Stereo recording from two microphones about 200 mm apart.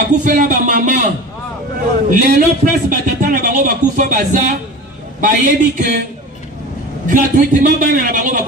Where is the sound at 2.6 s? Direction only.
50° right (ahead or behind).